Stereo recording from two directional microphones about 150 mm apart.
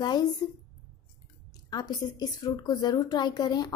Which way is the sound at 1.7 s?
25° left (ahead or behind).